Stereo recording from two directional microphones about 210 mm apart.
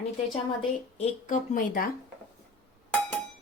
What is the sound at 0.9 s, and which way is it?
Speech, 40° left (ahead or behind).